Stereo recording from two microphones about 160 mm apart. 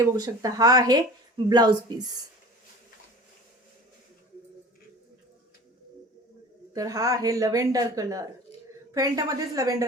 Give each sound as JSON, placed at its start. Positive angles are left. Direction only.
{"t": 0.0, "sound": "speech", "side_deg": -20}
{"t": 6.7, "sound": "speech", "side_deg": -20}